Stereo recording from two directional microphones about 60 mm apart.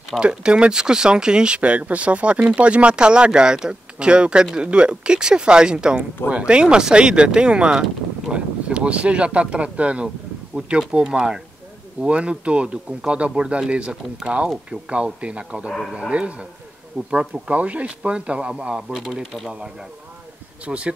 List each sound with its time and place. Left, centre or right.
0.2 s speech: centre
20.6 s speech: right